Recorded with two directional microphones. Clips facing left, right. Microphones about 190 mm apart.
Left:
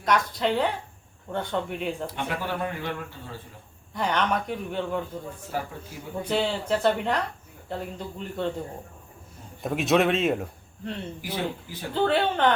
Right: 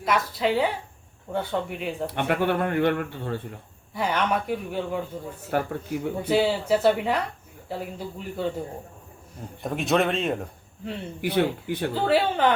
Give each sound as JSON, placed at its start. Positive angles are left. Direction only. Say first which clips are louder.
{"t": 0.0, "sound": "speech", "louder": "even", "side_deg": -5}
{"t": 2.0, "sound": "speech", "louder": "right 7 dB", "side_deg": -60}
{"t": 3.9, "sound": "speech", "louder": "right 1 dB", "side_deg": -5}
{"t": 5.5, "sound": "speech", "louder": "right 9 dB", "side_deg": -65}
{"t": 6.2, "sound": "speech", "louder": "right 3 dB", "side_deg": -5}
{"t": 9.6, "sound": "speech", "louder": "left 1 dB", "side_deg": 0}
{"t": 11.2, "sound": "speech", "louder": "right 10 dB", "side_deg": -65}
{"t": 12.0, "sound": "speech", "louder": "right 1 dB", "side_deg": -5}